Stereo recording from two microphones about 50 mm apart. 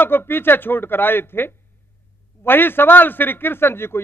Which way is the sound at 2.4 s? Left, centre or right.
Left.